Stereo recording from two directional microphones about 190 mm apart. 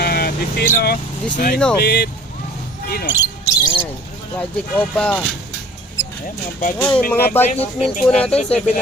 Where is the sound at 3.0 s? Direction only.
10° right (ahead or behind).